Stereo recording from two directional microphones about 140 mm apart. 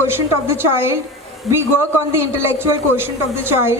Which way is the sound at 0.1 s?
15° right (ahead or behind).